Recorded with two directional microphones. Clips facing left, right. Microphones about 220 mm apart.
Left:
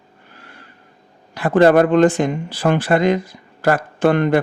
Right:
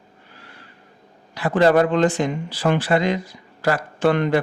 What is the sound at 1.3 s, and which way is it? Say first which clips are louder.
Speech: left 4 dB; 50° left (ahead or behind).